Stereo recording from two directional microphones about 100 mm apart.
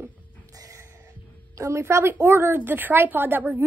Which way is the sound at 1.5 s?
30° right (ahead or behind).